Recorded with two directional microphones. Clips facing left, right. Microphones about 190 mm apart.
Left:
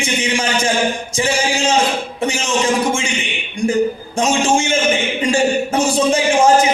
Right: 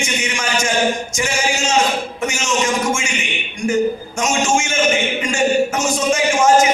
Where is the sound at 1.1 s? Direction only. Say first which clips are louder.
Left 3 dB; 30° left (ahead or behind).